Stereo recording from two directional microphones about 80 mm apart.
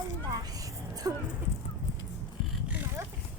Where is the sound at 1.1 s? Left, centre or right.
Right.